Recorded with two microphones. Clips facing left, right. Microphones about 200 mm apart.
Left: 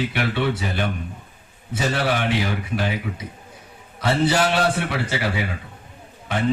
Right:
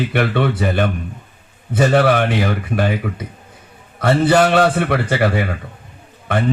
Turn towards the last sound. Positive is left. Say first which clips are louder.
# right 5 dB
turn(degrees=-55)  # may be behind; listen again after turning